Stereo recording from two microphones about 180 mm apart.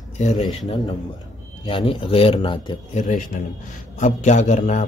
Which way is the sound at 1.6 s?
25° left (ahead or behind).